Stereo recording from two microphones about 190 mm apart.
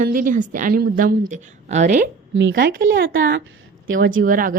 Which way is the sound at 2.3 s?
65° right (ahead or behind).